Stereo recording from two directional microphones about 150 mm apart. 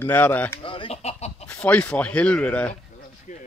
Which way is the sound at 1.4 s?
10° left (ahead or behind).